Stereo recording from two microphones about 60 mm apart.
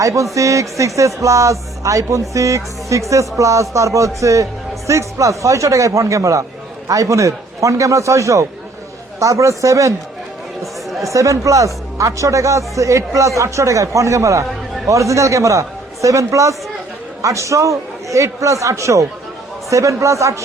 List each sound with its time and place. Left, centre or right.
0.0 s a man's voice: right
11.0 s a man's voice: right